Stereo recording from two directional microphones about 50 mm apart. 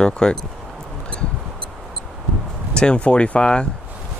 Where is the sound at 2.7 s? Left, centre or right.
Left.